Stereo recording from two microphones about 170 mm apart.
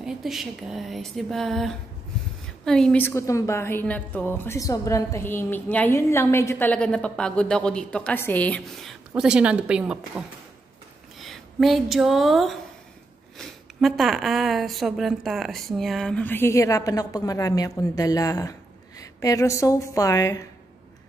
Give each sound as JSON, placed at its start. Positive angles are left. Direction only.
{"t": 0.0, "sound": "a woman's voice", "side_deg": 0}